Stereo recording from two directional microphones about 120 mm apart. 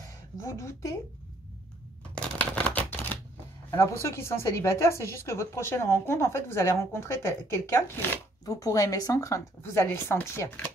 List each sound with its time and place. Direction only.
0.0 s a sound: 25° left (ahead or behind)
2.1 s shuffling cards: 10° left (ahead or behind)
3.7 s a woman's voice: 25° left (ahead or behind)